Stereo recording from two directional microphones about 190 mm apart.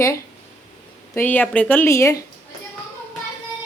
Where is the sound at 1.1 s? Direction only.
10° left (ahead or behind).